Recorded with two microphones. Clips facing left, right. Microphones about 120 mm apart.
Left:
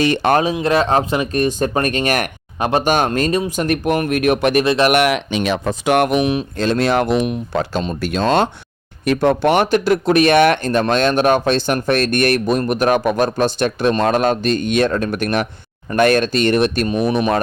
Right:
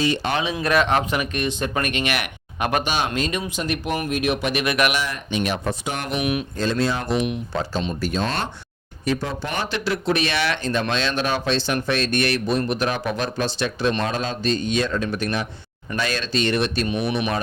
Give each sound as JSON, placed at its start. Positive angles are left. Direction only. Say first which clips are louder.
{"t": 0.0, "sound": "speech", "louder": "left 7 dB", "side_deg": 60}
{"t": 0.5, "sound": "speech", "louder": "left 4 dB", "side_deg": 25}
{"t": 1.4, "sound": "speech", "louder": "left 7 dB", "side_deg": 45}
{"t": 3.5, "sound": "speech", "louder": "left 8 dB", "side_deg": 50}
{"t": 4.6, "sound": "speech", "louder": "left 6 dB", "side_deg": 30}
{"t": 4.9, "sound": "speech", "louder": "left 10 dB", "side_deg": 75}
{"t": 6.1, "sound": "speech", "louder": "left 6 dB", "side_deg": 30}
{"t": 6.6, "sound": "speech", "louder": "left 8 dB", "side_deg": 65}